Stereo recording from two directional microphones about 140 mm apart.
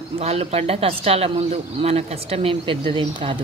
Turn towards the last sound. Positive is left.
turn(degrees=-35)  # may be behind; listen again after turning